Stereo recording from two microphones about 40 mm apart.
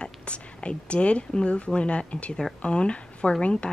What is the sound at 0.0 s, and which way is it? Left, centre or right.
A woman's voice, left.